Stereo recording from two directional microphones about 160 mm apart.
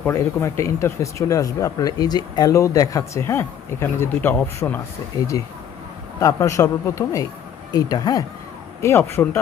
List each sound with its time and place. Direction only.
0.0 s speech: 15° left (ahead or behind)
6.1 s speech: 20° left (ahead or behind)